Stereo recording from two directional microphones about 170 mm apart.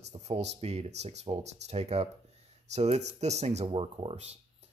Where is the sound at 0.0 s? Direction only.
40° right (ahead or behind).